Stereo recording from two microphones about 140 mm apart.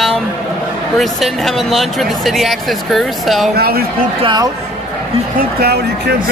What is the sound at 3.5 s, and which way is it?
Speech, 90° right.